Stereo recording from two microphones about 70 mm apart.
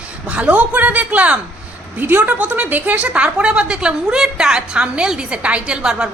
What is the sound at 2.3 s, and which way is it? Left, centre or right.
A woman's voice, centre.